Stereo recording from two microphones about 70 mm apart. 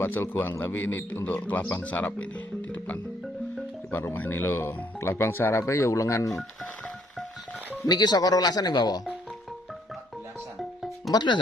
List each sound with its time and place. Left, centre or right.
0.0 s a man's voice: left
3.9 s speech: left
7.8 s speech: left
11.1 s speech: left